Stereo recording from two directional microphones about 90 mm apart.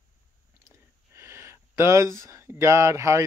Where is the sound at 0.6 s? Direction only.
30° right (ahead or behind).